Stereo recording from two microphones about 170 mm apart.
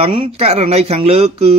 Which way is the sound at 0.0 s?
30° right (ahead or behind).